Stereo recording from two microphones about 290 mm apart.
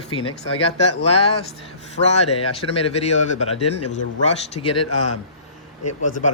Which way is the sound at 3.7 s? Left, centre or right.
Left.